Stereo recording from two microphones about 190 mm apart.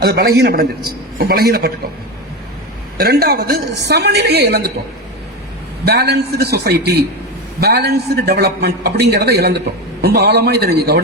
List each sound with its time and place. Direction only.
0.0 s a man's voice: 55° right (ahead or behind)
3.0 s a man's voice: 55° right (ahead or behind)
5.8 s a man's voice: 55° right (ahead or behind)